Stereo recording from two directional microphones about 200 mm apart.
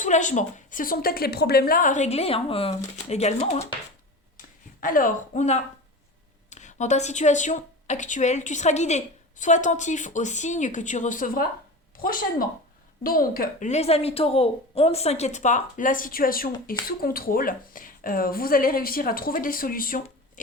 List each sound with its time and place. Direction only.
0.0 s speech: 40° left (ahead or behind)
4.4 s a sound: 45° left (ahead or behind)
6.5 s a woman's voice: 35° left (ahead or behind)